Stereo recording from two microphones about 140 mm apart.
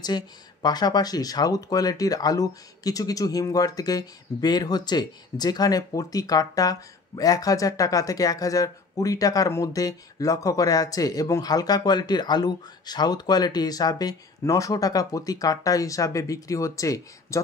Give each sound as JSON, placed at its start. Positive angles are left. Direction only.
{"t": 0.0, "sound": "speech", "side_deg": 30}